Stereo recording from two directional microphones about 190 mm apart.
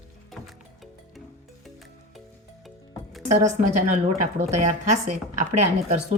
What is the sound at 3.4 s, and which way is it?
A woman's voice, 40° right (ahead or behind).